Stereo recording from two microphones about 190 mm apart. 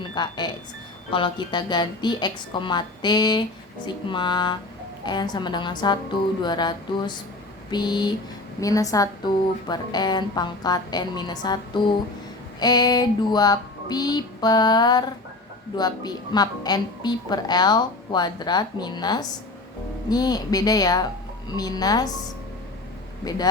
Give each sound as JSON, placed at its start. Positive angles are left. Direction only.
{"t": 0.1, "sound": "a woman's voice", "side_deg": 20}
{"t": 23.2, "sound": "a woman's voice", "side_deg": 20}